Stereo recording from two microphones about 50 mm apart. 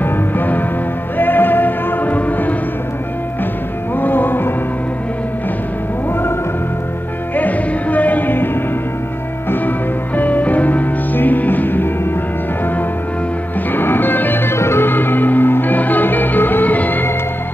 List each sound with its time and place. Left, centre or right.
0.0 s music: left
3.9 s music: left
7.3 s music: left
9.5 s music: left
13.7 s music: left